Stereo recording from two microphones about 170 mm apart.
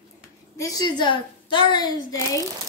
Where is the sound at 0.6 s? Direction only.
20° left (ahead or behind).